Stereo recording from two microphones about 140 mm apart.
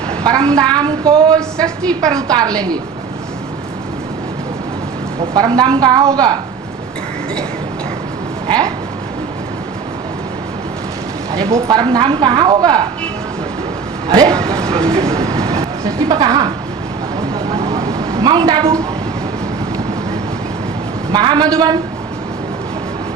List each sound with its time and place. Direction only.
0.3 s a woman's voice: 25° right (ahead or behind)
0.7 s a sound: 30° right (ahead or behind)
2.2 s a woman's voice: 25° right (ahead or behind)
5.3 s a woman's voice: 30° right (ahead or behind)
8.4 s speech: 30° right (ahead or behind)
11.3 s a woman's voice: 25° right (ahead or behind)
14.1 s speech: 25° right (ahead or behind)
17.7 s a sound: 25° right (ahead or behind)
21.1 s a sound: 30° right (ahead or behind)